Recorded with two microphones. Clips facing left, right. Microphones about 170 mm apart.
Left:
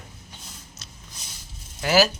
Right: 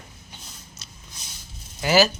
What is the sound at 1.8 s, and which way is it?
Speech, centre (ahead or behind).